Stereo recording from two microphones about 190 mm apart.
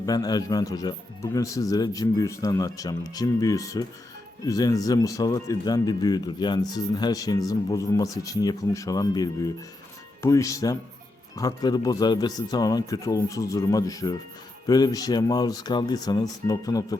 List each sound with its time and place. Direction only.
0.0 s speech: 20° left (ahead or behind)